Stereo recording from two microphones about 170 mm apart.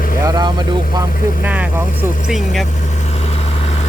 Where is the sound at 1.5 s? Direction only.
10° right (ahead or behind).